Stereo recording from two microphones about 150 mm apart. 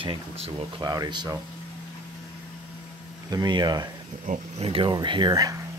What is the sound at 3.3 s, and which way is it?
Speech, 30° right (ahead or behind).